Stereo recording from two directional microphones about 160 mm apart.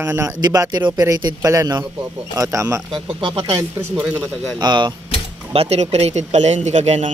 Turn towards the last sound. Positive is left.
turn(degrees=-45)  # may be behind; listen again after turning